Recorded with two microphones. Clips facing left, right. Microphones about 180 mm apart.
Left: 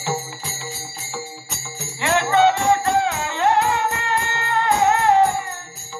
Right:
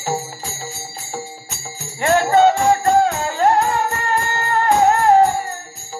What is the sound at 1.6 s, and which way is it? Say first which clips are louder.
Music: right 5 dB; 40° right (ahead or behind).